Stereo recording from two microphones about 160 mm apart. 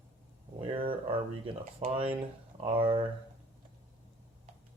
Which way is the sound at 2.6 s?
35° right (ahead or behind).